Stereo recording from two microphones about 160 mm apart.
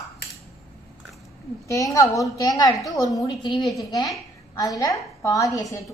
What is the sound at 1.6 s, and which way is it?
A woman's voice, 20° left (ahead or behind).